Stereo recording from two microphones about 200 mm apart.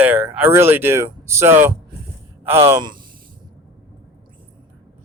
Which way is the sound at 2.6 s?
25° right (ahead or behind).